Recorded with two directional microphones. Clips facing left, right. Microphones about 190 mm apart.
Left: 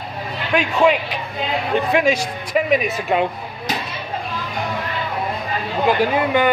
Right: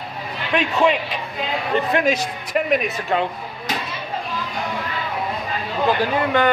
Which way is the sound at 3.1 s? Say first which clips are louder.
Left 3 dB; 15° left (ahead or behind).